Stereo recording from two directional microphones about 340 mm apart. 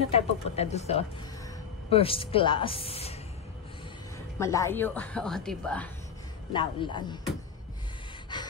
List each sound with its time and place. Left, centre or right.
0.1 s a woman's voice: centre
4.4 s a woman's voice: centre
6.5 s a woman's voice: centre
8.3 s gasp: centre